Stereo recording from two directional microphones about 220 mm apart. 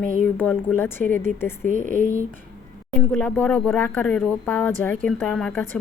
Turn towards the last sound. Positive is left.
turn(degrees=5)  # may be behind; listen again after turning